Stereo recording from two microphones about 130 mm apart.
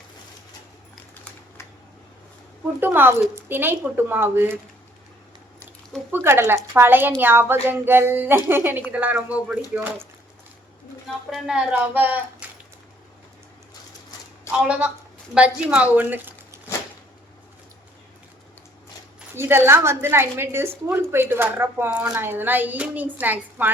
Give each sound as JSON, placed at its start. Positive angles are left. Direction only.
{"t": 2.8, "sound": "speech", "side_deg": -15}
{"t": 6.1, "sound": "speech", "side_deg": -15}
{"t": 11.3, "sound": "speech", "side_deg": -5}
{"t": 14.5, "sound": "speech", "side_deg": -10}
{"t": 19.3, "sound": "a woman's voice", "side_deg": -20}